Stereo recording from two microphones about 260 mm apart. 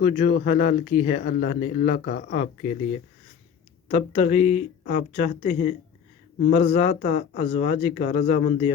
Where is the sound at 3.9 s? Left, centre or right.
Left.